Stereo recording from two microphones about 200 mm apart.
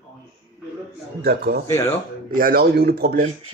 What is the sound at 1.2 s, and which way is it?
A man's voice, 50° right (ahead or behind).